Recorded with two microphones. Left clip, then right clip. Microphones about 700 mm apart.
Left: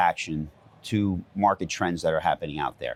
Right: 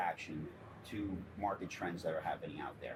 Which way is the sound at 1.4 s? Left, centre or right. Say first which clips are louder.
Left 17 dB; left.